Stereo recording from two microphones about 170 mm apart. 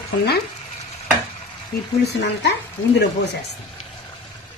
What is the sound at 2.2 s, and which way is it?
Speech, 90° left.